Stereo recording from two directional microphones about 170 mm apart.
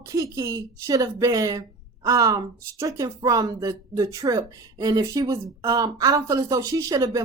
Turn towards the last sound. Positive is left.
turn(degrees=-20)  # may be behind; listen again after turning